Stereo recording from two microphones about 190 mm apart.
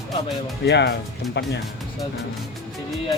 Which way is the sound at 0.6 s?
65° left (ahead or behind).